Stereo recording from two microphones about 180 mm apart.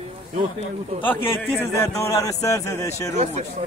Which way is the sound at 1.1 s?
10° left (ahead or behind).